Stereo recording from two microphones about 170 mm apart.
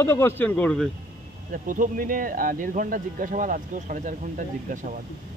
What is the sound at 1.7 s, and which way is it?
Speech, 55° right (ahead or behind).